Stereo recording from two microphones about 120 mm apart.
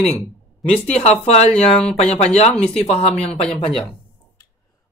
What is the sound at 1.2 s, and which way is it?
Speech, 60° left (ahead or behind).